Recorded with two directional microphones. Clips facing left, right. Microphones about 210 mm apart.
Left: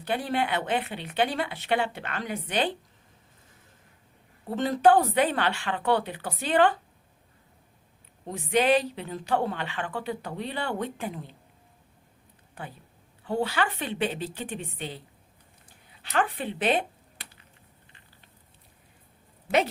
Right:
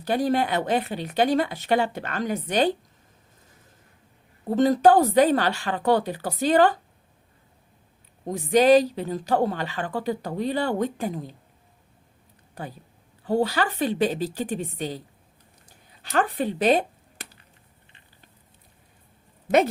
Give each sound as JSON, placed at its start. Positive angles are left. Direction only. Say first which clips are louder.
{"t": 0.0, "sound": "a woman's voice", "louder": "right 5 dB", "side_deg": -40}
{"t": 4.4, "sound": "a woman's voice", "louder": "right 4 dB", "side_deg": -40}
{"t": 8.3, "sound": "a woman's voice", "louder": "right 6 dB", "side_deg": -40}
{"t": 12.6, "sound": "a woman's voice", "louder": "right 5 dB", "side_deg": -40}
{"t": 16.1, "sound": "speech", "louder": "right 4 dB", "side_deg": -40}